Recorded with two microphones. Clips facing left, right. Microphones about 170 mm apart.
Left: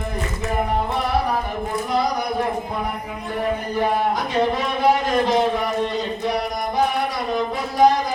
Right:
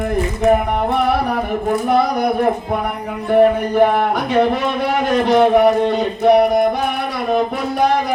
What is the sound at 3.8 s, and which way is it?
Speech, 65° right (ahead or behind).